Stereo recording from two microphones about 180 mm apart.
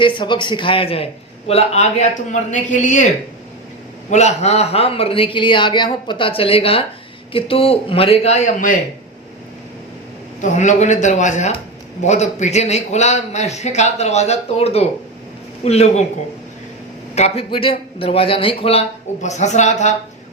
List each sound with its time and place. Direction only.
0.0 s a man's voice: 25° left (ahead or behind); by 3.1 s 45° left (ahead or behind)
4.1 s a man's voice: 40° left (ahead or behind)
10.4 s a man's voice: 40° left (ahead or behind)
17.2 s a man's voice: 35° left (ahead or behind)